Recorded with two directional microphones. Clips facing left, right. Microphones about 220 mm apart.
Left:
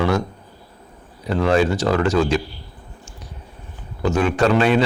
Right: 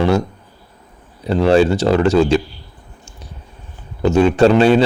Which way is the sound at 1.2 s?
30° right (ahead or behind).